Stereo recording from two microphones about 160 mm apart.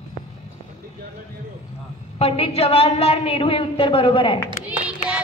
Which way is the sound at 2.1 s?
40° left (ahead or behind).